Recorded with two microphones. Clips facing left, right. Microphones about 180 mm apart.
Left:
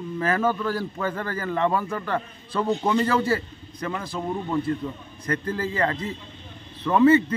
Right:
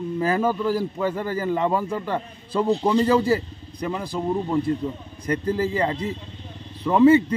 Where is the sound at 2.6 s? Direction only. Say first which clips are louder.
Right 3 dB; 35° right (ahead or behind).